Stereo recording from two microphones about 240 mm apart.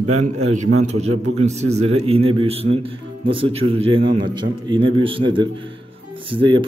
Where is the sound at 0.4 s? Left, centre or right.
Right.